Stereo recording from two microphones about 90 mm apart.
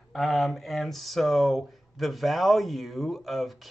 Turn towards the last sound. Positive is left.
turn(degrees=0)  # may be behind; listen again after turning